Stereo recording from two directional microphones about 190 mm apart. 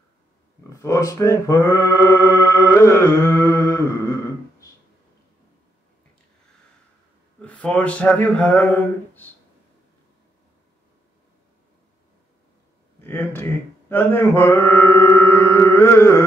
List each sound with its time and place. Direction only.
0.7 s a sound: 15° left (ahead or behind)
7.4 s speech: 5° left (ahead or behind)
13.0 s mantra: 10° left (ahead or behind)